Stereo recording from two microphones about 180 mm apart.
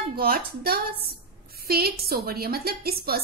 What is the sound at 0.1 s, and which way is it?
A woman's voice, 55° right (ahead or behind).